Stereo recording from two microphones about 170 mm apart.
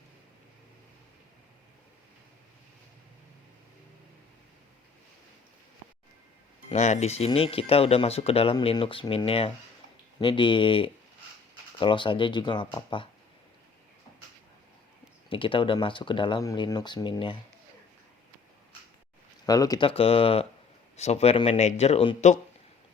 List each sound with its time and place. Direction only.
6.7 s speech: 45° left (ahead or behind)
15.3 s speech: 30° left (ahead or behind)
19.5 s speech: 20° left (ahead or behind)
19.9 s speech: 35° left (ahead or behind)